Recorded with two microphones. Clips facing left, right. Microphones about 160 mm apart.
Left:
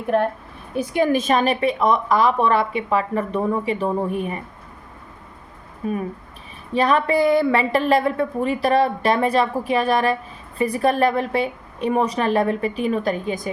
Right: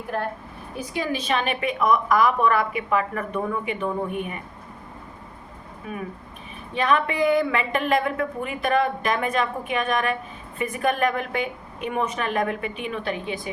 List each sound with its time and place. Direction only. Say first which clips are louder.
0.8 s a woman's voice: left 9 dB; 55° left (ahead or behind); by 4.4 s 35° left (ahead or behind)
5.8 s a woman's voice: left 8 dB; 35° left (ahead or behind)